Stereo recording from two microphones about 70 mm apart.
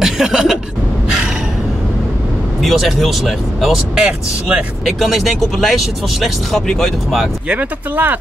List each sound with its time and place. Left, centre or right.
0.0 s speech: centre
2.6 s speech: centre
4.0 s speech: centre
4.8 s speech: centre
7.4 s speech: right